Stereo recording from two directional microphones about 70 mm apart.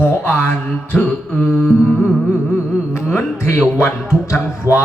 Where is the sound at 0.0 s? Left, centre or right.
Left.